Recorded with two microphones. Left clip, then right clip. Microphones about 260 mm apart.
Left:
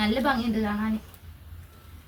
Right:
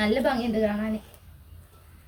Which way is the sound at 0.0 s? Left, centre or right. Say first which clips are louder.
Right 1 dB; centre.